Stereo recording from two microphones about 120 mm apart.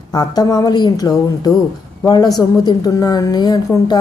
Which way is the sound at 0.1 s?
35° left (ahead or behind).